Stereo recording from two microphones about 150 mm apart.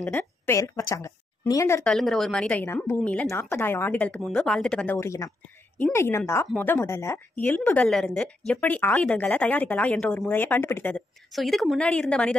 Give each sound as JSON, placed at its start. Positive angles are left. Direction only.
{"t": 0.0, "sound": "a woman's voice", "side_deg": 15}
{"t": 1.9, "sound": "speech", "side_deg": 0}
{"t": 4.9, "sound": "speech", "side_deg": 20}
{"t": 11.0, "sound": "a woman's voice", "side_deg": 0}